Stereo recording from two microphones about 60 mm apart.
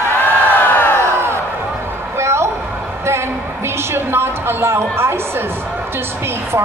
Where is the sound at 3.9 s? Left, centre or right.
Right.